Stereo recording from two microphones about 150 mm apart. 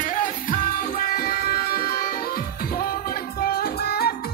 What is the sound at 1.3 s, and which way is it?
Music, 90° left.